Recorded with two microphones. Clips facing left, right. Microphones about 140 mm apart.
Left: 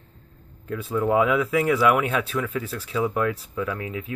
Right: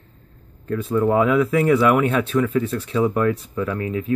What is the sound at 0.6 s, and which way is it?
Speech, 5° left (ahead or behind).